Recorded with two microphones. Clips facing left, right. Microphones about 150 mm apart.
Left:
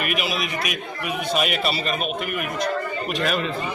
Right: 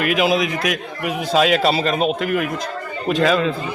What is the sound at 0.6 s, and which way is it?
A man's voice, 90° right.